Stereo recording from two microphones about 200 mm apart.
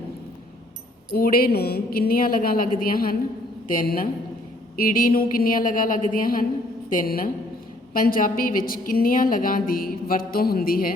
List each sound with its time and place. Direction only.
1.1 s a woman's voice: 50° left (ahead or behind)